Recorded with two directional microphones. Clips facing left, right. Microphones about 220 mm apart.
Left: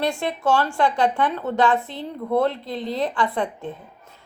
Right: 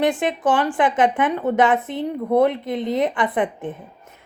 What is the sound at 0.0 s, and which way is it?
Speech, 20° right (ahead or behind).